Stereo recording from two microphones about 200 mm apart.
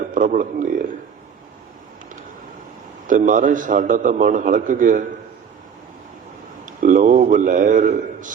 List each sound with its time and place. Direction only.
0.1 s a man's voice: 40° right (ahead or behind)
3.1 s a man's voice: 40° right (ahead or behind)
6.7 s a sound: 40° right (ahead or behind)